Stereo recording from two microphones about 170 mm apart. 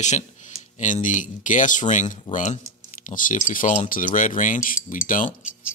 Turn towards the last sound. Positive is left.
turn(degrees=50)  # may be behind; listen again after turning